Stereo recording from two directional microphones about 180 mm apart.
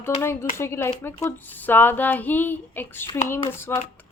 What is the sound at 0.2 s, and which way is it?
Speech, 15° left (ahead or behind).